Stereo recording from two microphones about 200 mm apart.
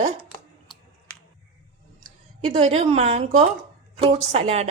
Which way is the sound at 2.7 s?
30° right (ahead or behind).